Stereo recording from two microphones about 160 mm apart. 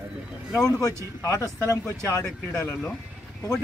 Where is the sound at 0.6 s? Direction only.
20° left (ahead or behind).